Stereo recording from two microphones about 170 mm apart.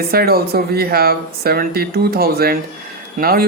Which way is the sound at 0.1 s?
65° right (ahead or behind).